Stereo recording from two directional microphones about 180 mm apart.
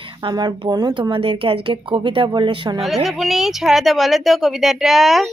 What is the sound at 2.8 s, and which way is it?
Speech, centre (ahead or behind).